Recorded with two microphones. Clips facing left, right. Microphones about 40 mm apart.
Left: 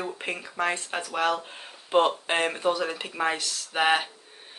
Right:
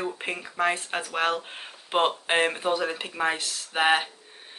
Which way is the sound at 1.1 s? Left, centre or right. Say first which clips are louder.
Left 1 dB; right.